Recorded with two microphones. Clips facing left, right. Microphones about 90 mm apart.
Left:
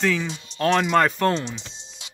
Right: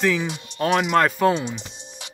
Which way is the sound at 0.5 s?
10° right (ahead or behind).